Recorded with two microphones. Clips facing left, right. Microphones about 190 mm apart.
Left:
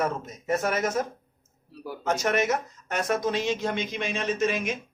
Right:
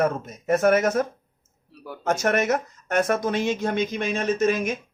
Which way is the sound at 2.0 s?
50° right (ahead or behind).